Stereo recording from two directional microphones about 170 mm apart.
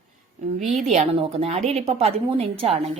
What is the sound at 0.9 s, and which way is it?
A woman's voice, 35° right (ahead or behind).